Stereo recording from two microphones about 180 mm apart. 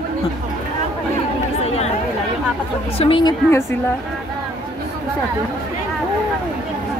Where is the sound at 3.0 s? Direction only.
30° left (ahead or behind).